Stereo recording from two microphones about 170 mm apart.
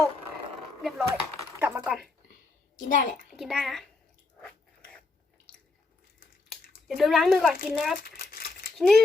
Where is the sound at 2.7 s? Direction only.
50° left (ahead or behind).